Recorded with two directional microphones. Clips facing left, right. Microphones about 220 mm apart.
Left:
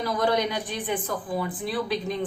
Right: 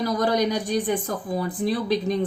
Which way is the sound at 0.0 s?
40° right (ahead or behind).